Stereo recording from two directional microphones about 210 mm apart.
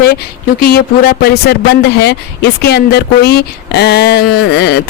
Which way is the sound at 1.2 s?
50° left (ahead or behind).